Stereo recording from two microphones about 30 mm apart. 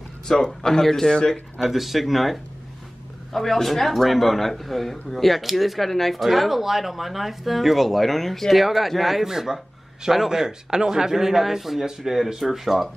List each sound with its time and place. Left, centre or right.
0.6 s a man's voice: centre
1.6 s speech: centre
3.3 s speech: centre
6.2 s speech: centre
9.2 s a man's voice: centre